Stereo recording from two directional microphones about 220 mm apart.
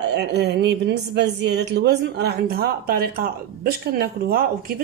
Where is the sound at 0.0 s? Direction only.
50° right (ahead or behind).